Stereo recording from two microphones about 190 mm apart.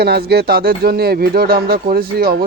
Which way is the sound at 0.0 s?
55° right (ahead or behind).